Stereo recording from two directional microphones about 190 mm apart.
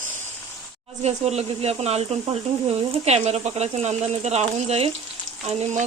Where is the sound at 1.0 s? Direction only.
35° right (ahead or behind).